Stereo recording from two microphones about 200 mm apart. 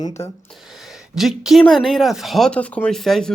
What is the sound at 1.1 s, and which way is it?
Speech, centre (ahead or behind).